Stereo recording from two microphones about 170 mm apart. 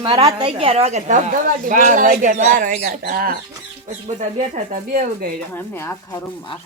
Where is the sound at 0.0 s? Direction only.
30° right (ahead or behind); by 5.3 s 50° right (ahead or behind).